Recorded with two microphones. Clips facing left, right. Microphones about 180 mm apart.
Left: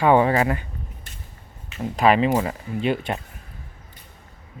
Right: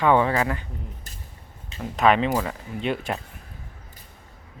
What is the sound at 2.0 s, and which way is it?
Speech, 5° left (ahead or behind).